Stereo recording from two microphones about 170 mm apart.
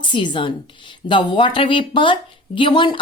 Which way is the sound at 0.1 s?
30° left (ahead or behind).